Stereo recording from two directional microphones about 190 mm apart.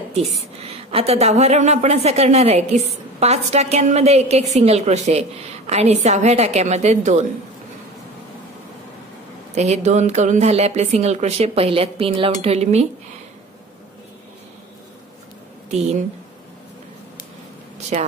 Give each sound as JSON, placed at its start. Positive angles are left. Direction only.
{"t": 0.1, "sound": "a woman's voice", "side_deg": -35}
{"t": 9.6, "sound": "a woman's voice", "side_deg": -35}
{"t": 17.9, "sound": "a woman's voice", "side_deg": -35}